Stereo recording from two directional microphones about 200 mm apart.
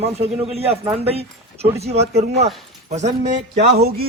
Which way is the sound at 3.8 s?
50° right (ahead or behind).